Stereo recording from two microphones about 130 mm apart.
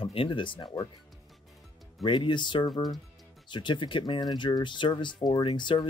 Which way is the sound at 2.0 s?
35° left (ahead or behind).